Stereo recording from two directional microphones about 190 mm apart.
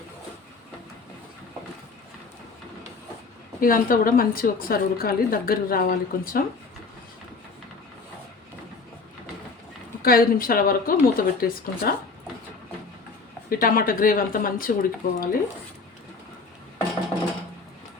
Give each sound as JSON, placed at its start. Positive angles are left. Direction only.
{"t": 3.6, "sound": "a woman's voice", "side_deg": 50}
{"t": 10.0, "sound": "a woman's voice", "side_deg": 50}
{"t": 13.5, "sound": "a woman's voice", "side_deg": 50}